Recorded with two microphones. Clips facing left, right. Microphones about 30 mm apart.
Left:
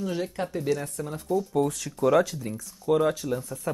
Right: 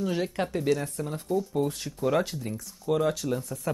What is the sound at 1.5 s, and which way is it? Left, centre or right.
Speech, left.